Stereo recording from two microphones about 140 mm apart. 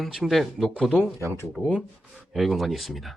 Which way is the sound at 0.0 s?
Centre (ahead or behind).